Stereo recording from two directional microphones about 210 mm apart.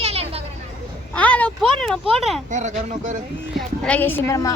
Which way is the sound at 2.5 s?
35° right (ahead or behind).